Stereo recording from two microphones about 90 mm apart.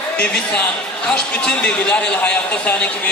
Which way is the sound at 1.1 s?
10° left (ahead or behind).